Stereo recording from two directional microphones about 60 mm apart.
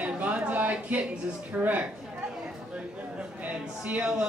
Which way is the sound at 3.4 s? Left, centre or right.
Right.